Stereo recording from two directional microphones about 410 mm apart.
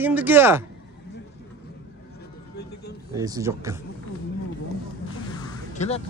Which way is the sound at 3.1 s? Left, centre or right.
Centre.